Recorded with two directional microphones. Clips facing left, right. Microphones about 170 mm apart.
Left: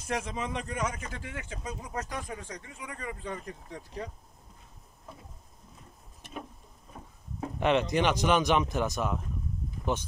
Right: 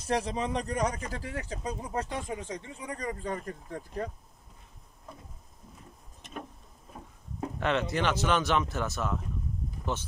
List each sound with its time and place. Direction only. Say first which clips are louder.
0.0 s speech: right 4 dB; 35° right (ahead or behind); by 4.1 s 50° right (ahead or behind)
7.6 s speech: left 3 dB; 15° left (ahead or behind)